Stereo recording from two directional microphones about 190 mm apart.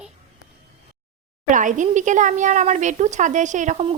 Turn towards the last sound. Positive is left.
turn(degrees=-35)  # may be behind; listen again after turning